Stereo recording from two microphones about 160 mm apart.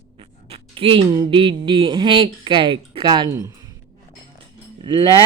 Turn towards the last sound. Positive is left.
turn(degrees=-30)  # may be behind; listen again after turning